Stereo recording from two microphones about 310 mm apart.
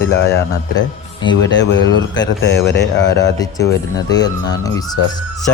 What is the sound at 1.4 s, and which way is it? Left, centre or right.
A man's voice, left.